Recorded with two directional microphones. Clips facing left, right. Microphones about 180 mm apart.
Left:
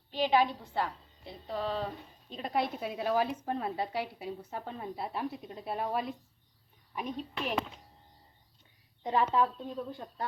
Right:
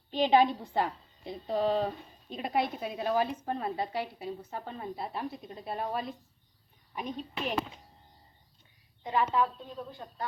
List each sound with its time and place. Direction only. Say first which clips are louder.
0.1 s a woman's voice: right 3 dB; 20° right (ahead or behind)
2.3 s a woman's voice: right 2 dB; 5° right (ahead or behind)
9.0 s a woman's voice: even; 35° left (ahead or behind)